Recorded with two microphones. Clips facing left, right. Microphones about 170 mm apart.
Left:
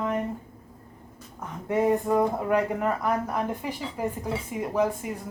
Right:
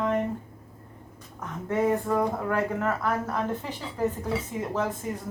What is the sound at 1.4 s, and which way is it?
Speech, 15° left (ahead or behind).